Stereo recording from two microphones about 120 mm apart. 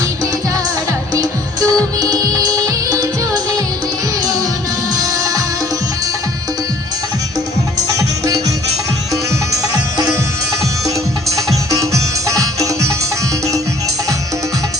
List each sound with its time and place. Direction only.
1.1 s music: 30° right (ahead or behind)
4.9 s music: 30° right (ahead or behind)
7.9 s music: 25° right (ahead or behind)
11.7 s music: 25° right (ahead or behind)